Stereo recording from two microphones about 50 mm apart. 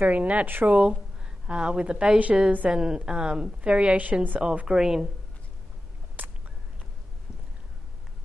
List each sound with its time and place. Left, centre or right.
0.0 s a woman's voice: right
0.5 s speech: right
1.5 s a woman's voice: centre
4.4 s a woman's voice: right
6.2 s a sound: right